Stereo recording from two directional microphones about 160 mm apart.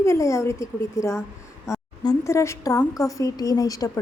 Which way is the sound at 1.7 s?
15° left (ahead or behind).